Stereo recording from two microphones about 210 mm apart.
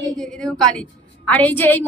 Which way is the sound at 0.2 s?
5° left (ahead or behind).